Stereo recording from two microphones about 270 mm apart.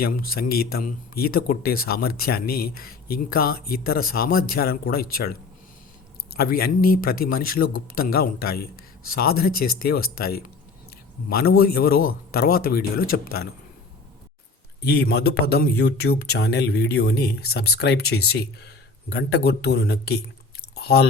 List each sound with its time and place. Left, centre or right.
0.0 s speech: left
14.8 s speech: left